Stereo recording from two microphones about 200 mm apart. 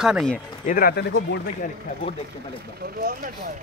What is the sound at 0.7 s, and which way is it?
Speech, 50° left (ahead or behind).